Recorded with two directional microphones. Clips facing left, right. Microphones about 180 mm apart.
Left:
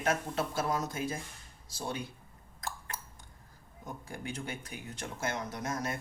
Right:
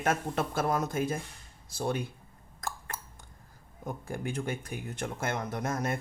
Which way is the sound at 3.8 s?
50° right (ahead or behind).